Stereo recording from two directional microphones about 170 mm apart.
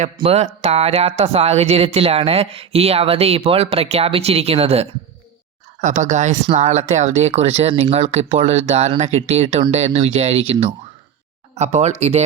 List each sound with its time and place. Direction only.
0.2 s speech: 35° right (ahead or behind)